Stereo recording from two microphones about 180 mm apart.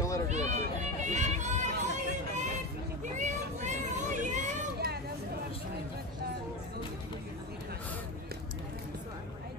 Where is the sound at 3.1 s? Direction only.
40° right (ahead or behind).